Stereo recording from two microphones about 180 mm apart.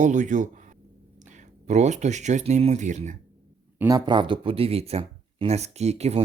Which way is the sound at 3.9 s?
25° right (ahead or behind).